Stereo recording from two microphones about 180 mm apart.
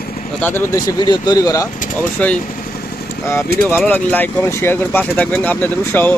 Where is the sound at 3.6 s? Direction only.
10° left (ahead or behind).